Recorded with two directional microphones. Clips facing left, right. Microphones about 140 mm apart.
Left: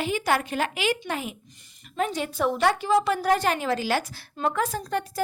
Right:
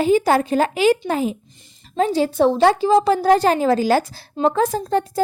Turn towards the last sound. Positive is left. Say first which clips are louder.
# right 8 dB
turn(degrees=-30)  # may be behind; listen again after turning